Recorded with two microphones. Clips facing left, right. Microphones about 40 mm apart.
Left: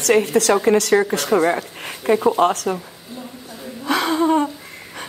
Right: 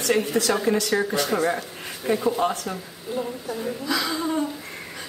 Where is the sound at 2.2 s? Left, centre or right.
Left.